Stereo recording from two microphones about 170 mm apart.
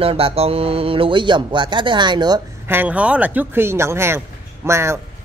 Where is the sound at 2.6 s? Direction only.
10° right (ahead or behind).